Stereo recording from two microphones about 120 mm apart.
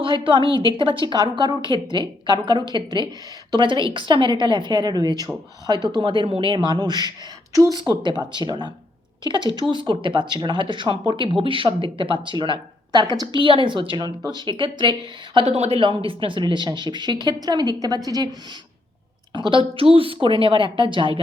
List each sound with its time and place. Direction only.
0.0 s a woman's voice: 45° right (ahead or behind); by 7.8 s 25° right (ahead or behind)
7.8 s speech: 40° right (ahead or behind)
15.4 s speech: 60° right (ahead or behind); by 18.3 s 35° right (ahead or behind)
19.3 s speech: 45° right (ahead or behind)